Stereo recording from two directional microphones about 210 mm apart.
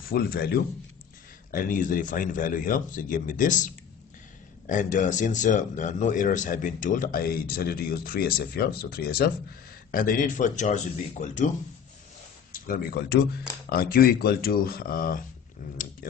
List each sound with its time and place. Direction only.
0.1 s speech: 45° left (ahead or behind)
12.6 s speech: 45° left (ahead or behind)